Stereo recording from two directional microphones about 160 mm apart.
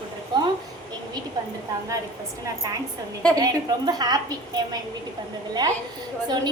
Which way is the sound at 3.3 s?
25° right (ahead or behind).